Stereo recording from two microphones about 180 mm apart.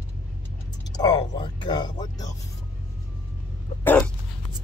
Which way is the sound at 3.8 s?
10° left (ahead or behind).